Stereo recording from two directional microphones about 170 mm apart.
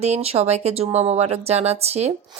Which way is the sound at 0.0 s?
40° right (ahead or behind).